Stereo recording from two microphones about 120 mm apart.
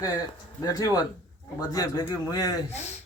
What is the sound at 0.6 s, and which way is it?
Speech, 30° left (ahead or behind).